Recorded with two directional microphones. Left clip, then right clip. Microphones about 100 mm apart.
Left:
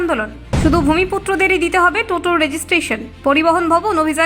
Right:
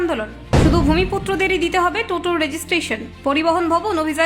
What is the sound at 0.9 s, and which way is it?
A woman's voice, 30° left (ahead or behind).